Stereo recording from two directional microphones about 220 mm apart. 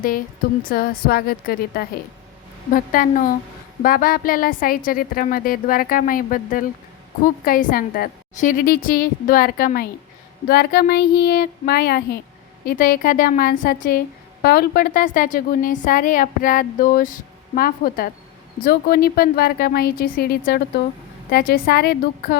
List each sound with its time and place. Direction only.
0.7 s a woman's voice: 40° left (ahead or behind)